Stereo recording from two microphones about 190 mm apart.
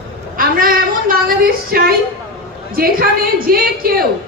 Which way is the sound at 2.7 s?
50° right (ahead or behind).